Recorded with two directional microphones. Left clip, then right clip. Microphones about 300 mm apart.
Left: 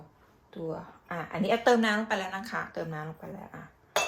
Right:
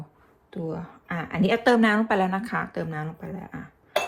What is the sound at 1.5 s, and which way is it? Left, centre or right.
Speech, right.